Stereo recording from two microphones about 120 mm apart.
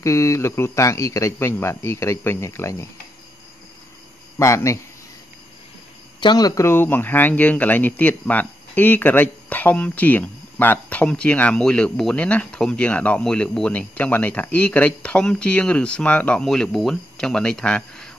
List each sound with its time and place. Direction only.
0.0 s speech: 25° left (ahead or behind)
4.4 s speech: 25° left (ahead or behind)
6.2 s speech: 30° left (ahead or behind); by 18.1 s 5° left (ahead or behind)